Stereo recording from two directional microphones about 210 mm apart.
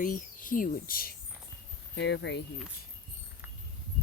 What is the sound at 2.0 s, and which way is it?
Speech, 55° left (ahead or behind).